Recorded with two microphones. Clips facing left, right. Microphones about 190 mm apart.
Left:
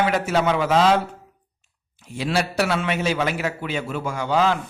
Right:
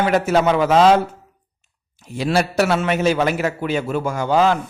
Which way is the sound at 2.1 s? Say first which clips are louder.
Right 4 dB; 45° right (ahead or behind).